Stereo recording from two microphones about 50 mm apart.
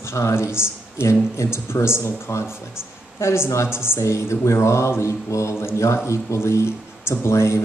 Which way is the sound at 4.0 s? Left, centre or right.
Left.